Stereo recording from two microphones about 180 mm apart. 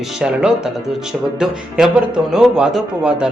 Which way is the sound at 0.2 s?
5° right (ahead or behind).